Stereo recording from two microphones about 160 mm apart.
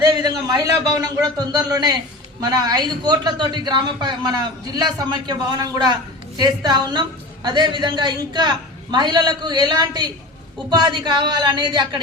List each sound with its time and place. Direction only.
0.0 s speech: 25° right (ahead or behind)